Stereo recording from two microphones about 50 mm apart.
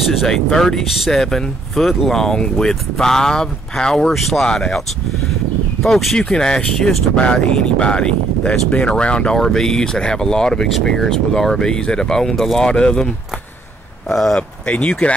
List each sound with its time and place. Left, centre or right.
0.0 s speech: centre
0.3 s speech: centre
4.1 s speech: centre
6.1 s speech: centre
9.4 s speech: centre
14.7 s speech: left